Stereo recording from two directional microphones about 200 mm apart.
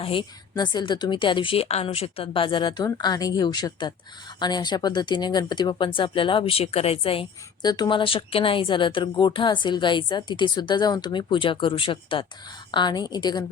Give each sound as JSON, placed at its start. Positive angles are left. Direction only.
{"t": 0.0, "sound": "speech", "side_deg": 25}